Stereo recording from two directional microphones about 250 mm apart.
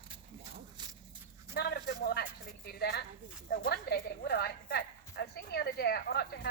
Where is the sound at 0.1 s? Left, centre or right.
Centre.